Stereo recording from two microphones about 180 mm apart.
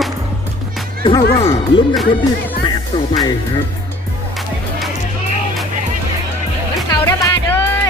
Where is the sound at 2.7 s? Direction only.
20° left (ahead or behind).